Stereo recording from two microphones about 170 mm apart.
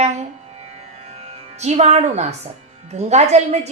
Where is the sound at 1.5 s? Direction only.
40° right (ahead or behind).